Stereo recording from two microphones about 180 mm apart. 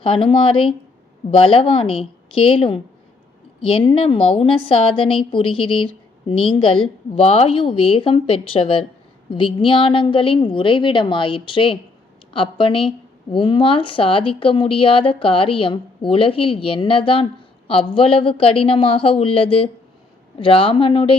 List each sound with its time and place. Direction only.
0.0 s speech: 30° left (ahead or behind)